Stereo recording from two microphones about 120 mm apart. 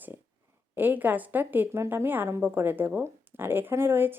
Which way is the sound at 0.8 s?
15° right (ahead or behind).